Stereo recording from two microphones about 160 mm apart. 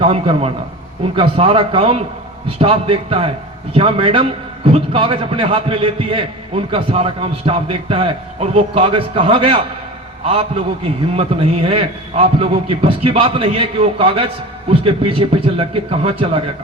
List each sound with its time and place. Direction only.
0.0 s a man's voice: 35° right (ahead or behind)